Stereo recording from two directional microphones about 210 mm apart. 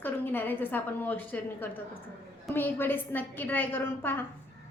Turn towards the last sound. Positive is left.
turn(degrees=10)  # may be behind; listen again after turning